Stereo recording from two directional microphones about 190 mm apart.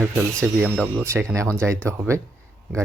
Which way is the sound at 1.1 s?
15° right (ahead or behind).